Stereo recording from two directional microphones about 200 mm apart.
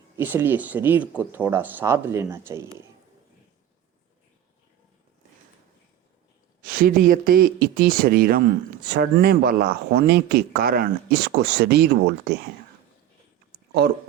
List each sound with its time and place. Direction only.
0.2 s speech: 10° right (ahead or behind)
6.7 s speech: 45° right (ahead or behind)